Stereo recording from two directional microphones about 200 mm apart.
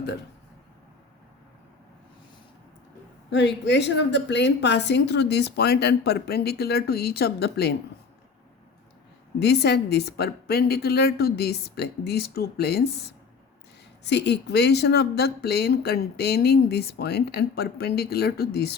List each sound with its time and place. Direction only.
3.3 s a woman's voice: 60° left (ahead or behind)
9.4 s speech: 55° left (ahead or behind)